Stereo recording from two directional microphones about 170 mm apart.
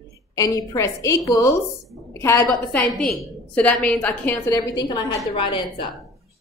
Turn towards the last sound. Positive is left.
turn(degrees=30)  # may be behind; listen again after turning